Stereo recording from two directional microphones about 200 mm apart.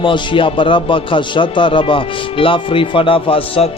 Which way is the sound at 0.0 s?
25° left (ahead or behind).